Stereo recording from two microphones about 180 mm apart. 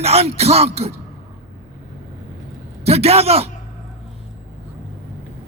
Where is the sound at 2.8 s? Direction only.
35° right (ahead or behind).